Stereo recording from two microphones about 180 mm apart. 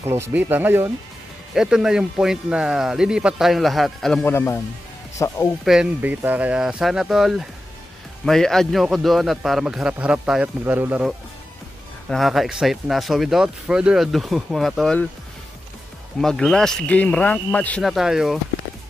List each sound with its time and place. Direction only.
0.0 s speech: 15° right (ahead or behind); by 4.3 s centre (ahead or behind)
4.3 s speech: 15° left (ahead or behind)
5.7 s speech: 5° right (ahead or behind)
16.2 s speech: centre (ahead or behind)